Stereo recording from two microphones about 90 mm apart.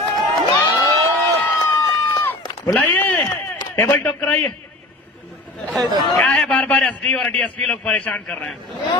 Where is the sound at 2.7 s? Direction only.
20° left (ahead or behind).